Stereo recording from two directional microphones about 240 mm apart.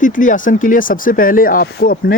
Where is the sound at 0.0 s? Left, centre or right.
Left.